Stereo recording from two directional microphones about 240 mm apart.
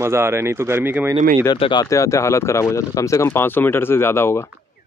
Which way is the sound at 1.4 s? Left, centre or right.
Centre.